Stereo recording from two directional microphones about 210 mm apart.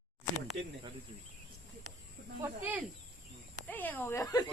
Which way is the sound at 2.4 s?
10° right (ahead or behind).